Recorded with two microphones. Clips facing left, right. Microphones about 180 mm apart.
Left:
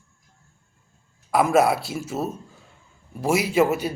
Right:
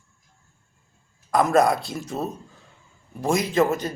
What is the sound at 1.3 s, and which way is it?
A man's voice, 5° left (ahead or behind).